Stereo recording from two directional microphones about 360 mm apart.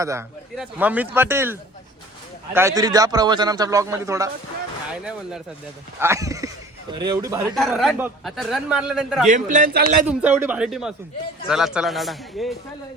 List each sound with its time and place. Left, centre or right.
0.0 s a man's voice: centre
6.0 s a man's voice: centre
9.2 s a man's voice: right
10.1 s a man's voice: centre